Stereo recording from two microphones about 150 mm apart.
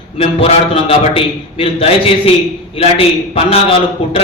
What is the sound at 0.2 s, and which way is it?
A man's voice, 40° left (ahead or behind).